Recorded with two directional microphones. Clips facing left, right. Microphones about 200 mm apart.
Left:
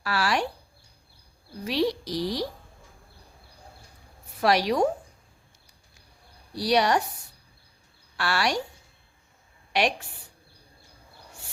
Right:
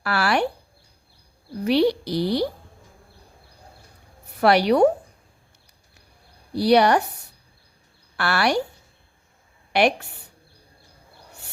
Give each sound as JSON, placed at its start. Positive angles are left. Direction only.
{"t": 0.0, "sound": "speech", "side_deg": -65}
{"t": 1.6, "sound": "speech", "side_deg": -60}
{"t": 4.4, "sound": "speech", "side_deg": -60}
{"t": 6.5, "sound": "speech", "side_deg": -60}
{"t": 8.1, "sound": "speech", "side_deg": -65}
{"t": 9.7, "sound": "speech", "side_deg": -60}